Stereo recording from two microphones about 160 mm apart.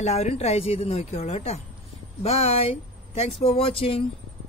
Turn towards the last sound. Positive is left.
turn(degrees=35)  # may be behind; listen again after turning